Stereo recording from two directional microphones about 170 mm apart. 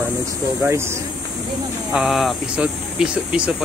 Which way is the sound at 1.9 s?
Centre (ahead or behind).